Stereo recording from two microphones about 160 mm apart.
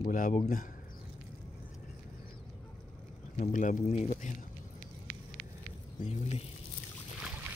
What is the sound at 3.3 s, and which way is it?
A man's voice, 55° left (ahead or behind).